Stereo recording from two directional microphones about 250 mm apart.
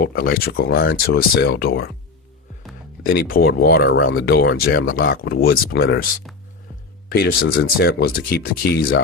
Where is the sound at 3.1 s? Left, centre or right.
Left.